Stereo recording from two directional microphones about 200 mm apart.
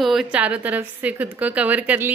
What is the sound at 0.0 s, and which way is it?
A woman's voice, centre (ahead or behind).